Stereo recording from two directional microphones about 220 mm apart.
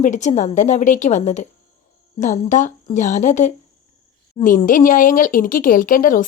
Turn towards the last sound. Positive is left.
turn(degrees=35)  # may be behind; listen again after turning